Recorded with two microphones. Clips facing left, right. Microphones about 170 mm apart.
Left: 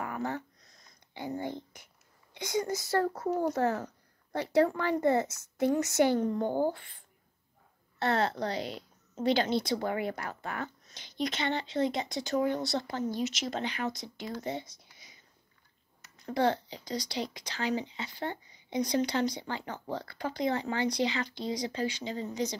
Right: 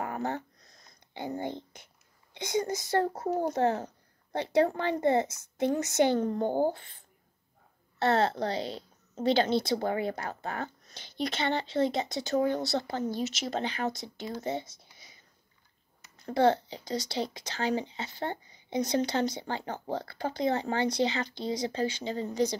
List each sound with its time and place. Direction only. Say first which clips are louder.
0.0 s a sound: right 2 dB; 35° right (ahead or behind)
1.4 s speech: right 1 dB; 25° right (ahead or behind)
3.1 s speech: even; 35° right (ahead or behind)
3.5 s a woman's voice: right 2 dB; 25° right (ahead or behind)
6.1 s speech: even; 45° right (ahead or behind)
6.4 s speech: right 2 dB; 30° right (ahead or behind)
8.0 s speech: right 3 dB; 30° right (ahead or behind)
16.3 s speech: right 4 dB; 30° right (ahead or behind)